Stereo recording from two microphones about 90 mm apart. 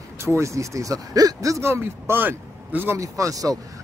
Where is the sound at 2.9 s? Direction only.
40° right (ahead or behind).